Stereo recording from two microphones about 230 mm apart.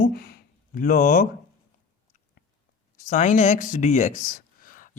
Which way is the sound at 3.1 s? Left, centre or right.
Left.